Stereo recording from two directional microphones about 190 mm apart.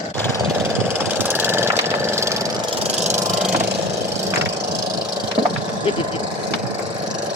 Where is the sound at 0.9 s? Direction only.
10° right (ahead or behind).